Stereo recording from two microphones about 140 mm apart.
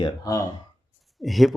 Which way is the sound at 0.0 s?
25° left (ahead or behind).